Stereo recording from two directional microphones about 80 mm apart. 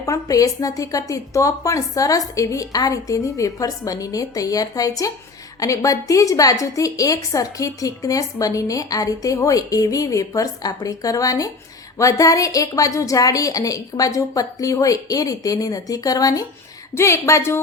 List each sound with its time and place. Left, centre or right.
0.0 s a woman's voice: left
16.9 s a woman's voice: left